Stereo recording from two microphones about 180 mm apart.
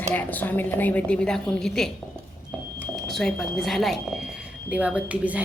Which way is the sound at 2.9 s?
Centre (ahead or behind).